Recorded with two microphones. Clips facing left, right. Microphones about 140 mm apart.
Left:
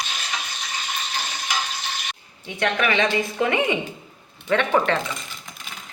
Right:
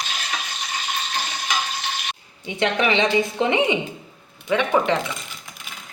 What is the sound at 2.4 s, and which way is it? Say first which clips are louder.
A woman's voice: right 2 dB; 20° right (ahead or behind).